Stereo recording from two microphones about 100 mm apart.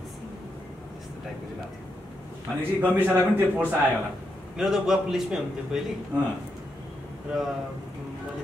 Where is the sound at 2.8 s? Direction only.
20° right (ahead or behind).